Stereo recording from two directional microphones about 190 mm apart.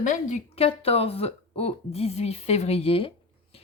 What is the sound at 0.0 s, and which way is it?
A woman's voice, 40° left (ahead or behind).